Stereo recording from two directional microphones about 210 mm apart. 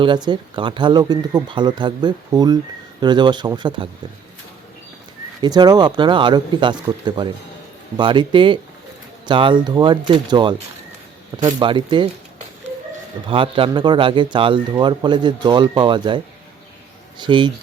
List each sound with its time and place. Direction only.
0.0 s a man's voice: 20° right (ahead or behind)
5.4 s a man's voice: 20° right (ahead or behind)
7.9 s a man's voice: 20° right (ahead or behind)
13.2 s a man's voice: 25° right (ahead or behind)